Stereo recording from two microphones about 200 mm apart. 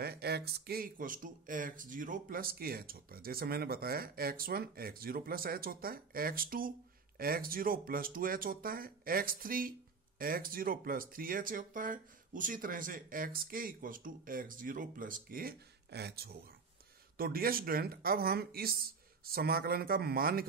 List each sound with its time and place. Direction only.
0.0 s speech: 50° right (ahead or behind)